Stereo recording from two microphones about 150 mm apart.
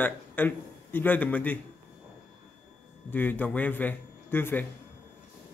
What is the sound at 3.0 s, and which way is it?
A man's voice, 10° left (ahead or behind).